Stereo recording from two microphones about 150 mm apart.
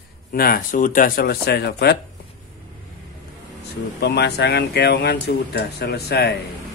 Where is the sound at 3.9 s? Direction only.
90° left.